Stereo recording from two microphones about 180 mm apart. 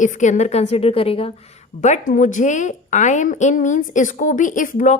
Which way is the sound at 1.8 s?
45° left (ahead or behind).